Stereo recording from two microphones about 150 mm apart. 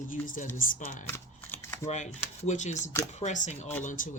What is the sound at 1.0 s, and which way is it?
Typing, 15° left (ahead or behind).